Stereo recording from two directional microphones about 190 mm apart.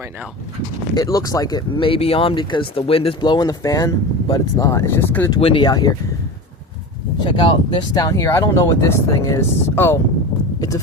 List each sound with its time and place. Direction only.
0.9 s speech: 20° left (ahead or behind)
5.4 s speech: 25° left (ahead or behind)
7.3 s speech: 25° left (ahead or behind)